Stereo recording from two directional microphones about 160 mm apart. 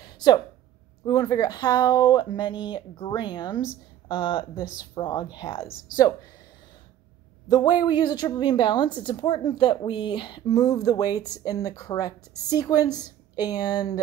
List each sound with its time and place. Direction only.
0.0 s a sound: 25° left (ahead or behind)
1.0 s a woman's voice: 25° left (ahead or behind)
7.4 s a woman's voice: 25° left (ahead or behind)